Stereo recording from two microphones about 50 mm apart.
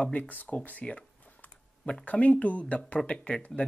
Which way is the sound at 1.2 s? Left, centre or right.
Left.